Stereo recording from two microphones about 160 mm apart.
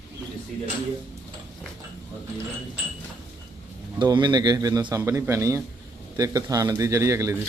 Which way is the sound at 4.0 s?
30° right (ahead or behind).